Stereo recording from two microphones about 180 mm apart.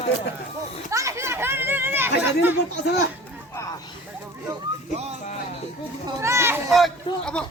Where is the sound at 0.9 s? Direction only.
15° right (ahead or behind).